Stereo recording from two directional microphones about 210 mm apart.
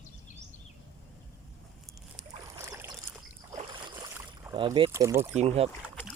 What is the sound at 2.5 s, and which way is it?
Boat, 10° right (ahead or behind).